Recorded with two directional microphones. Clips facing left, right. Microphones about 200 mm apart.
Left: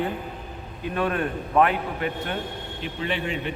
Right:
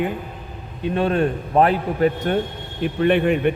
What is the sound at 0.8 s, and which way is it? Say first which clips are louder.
A man's voice: right 6 dB; 25° right (ahead or behind).